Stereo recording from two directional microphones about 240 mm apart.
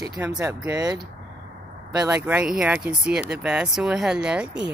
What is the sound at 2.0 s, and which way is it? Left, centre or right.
Speech, centre.